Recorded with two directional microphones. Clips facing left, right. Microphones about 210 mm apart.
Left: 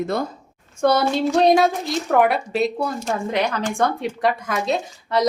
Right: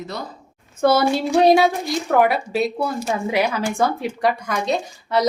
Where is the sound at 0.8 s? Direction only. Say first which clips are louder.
Right 1 dB; 5° right (ahead or behind).